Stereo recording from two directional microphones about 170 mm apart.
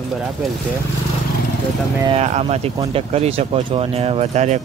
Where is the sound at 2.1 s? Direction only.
40° right (ahead or behind).